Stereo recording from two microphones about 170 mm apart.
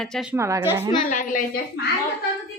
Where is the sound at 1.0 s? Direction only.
50° left (ahead or behind).